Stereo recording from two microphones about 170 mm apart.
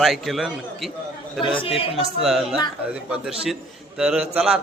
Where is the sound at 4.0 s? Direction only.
5° right (ahead or behind).